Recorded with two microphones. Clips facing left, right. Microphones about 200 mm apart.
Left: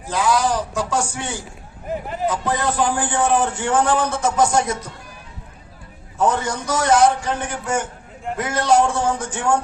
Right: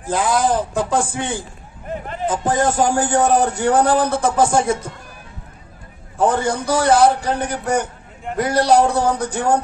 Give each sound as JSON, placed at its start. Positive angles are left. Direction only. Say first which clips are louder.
{"t": 0.0, "sound": "a man's voice", "louder": "right 1 dB", "side_deg": -50}
{"t": 6.1, "sound": "a man's voice", "louder": "right 3 dB", "side_deg": -30}